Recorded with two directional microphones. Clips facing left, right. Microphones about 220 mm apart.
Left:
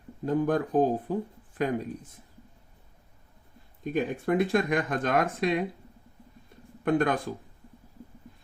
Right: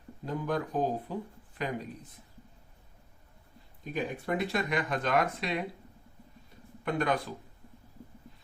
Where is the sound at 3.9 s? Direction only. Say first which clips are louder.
Left 6 dB; 50° left (ahead or behind).